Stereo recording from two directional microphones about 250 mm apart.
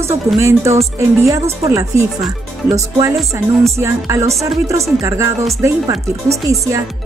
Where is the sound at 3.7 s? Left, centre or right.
Centre.